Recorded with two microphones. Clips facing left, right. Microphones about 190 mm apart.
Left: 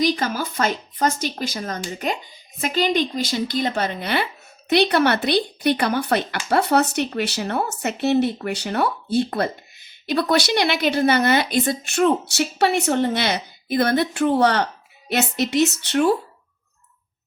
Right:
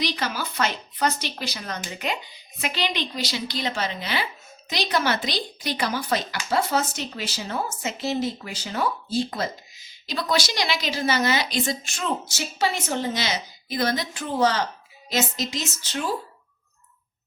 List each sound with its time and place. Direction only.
0.0 s a woman's voice: 45° left (ahead or behind); by 16.1 s 65° left (ahead or behind)